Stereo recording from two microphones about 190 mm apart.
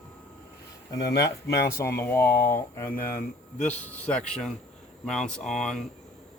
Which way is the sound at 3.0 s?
50° left (ahead or behind).